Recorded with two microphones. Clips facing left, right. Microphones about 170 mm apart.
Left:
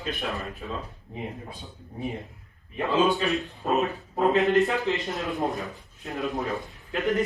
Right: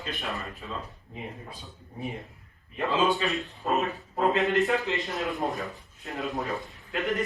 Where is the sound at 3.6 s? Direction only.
20° left (ahead or behind).